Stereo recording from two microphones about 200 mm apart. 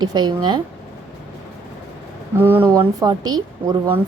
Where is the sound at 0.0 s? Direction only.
20° right (ahead or behind).